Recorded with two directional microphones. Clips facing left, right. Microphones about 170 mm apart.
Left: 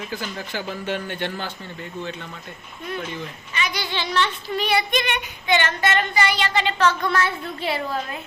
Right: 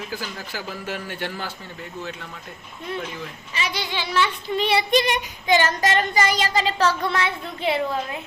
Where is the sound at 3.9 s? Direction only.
10° right (ahead or behind).